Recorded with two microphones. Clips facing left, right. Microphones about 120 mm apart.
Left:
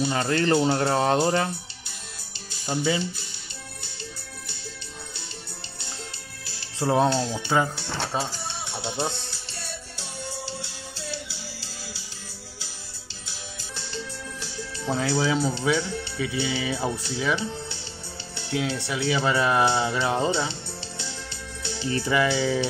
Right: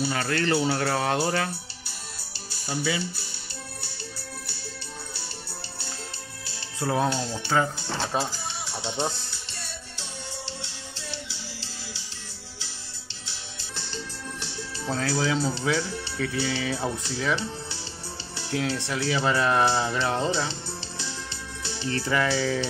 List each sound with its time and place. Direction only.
0.1 s speech: 25° left (ahead or behind)
2.6 s speech: 25° left (ahead or behind)
6.8 s speech: 30° left (ahead or behind)
7.2 s speech: 15° left (ahead or behind)
8.1 s speech: centre (ahead or behind)
10.4 s music: 25° right (ahead or behind)
14.9 s speech: 5° left (ahead or behind)
18.5 s speech: 5° left (ahead or behind)
21.8 s speech: 10° left (ahead or behind)